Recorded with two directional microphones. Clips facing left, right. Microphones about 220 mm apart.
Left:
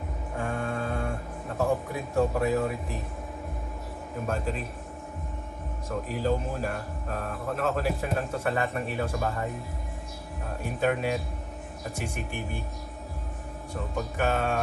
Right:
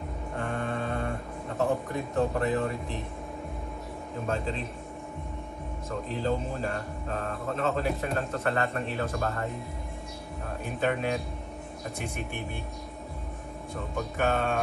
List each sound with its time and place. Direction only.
0.4 s a sound: 5° left (ahead or behind)
1.9 s speech: 5° left (ahead or behind)
5.9 s speech: 5° left (ahead or behind)
10.6 s speech: 5° left (ahead or behind)
13.9 s speech: 5° left (ahead or behind)